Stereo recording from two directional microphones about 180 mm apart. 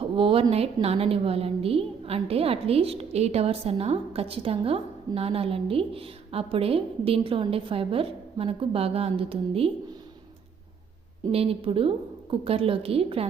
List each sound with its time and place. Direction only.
0.2 s a woman's voice: 30° right (ahead or behind)
11.3 s a woman's voice: 30° right (ahead or behind)